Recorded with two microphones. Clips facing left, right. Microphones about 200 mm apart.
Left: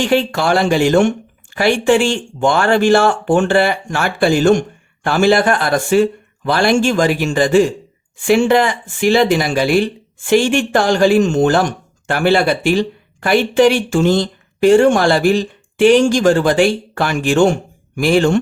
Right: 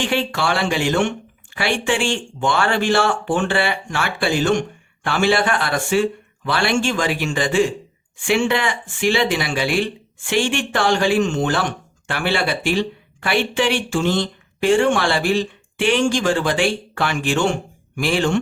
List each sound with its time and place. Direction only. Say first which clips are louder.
0.0 s speech: left 6 dB; 40° left (ahead or behind)